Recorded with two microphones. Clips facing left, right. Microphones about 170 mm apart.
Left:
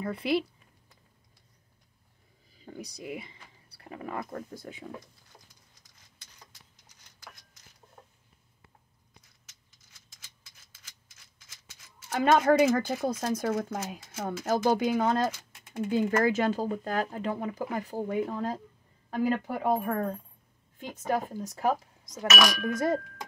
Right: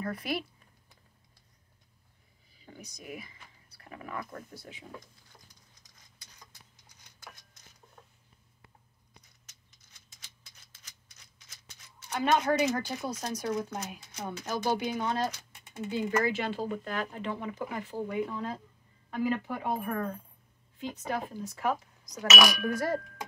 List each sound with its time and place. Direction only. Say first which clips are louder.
0.0 s speech: left 5 dB; 25° left (ahead or behind)
2.6 s speech: left 7 dB; 35° left (ahead or behind); by 4.8 s 50° left (ahead or behind)
12.2 s speech: left 5 dB; 50° left (ahead or behind); by 22.9 s 20° left (ahead or behind)